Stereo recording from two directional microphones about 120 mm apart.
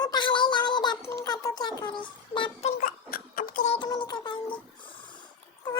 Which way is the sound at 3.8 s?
40° left (ahead or behind).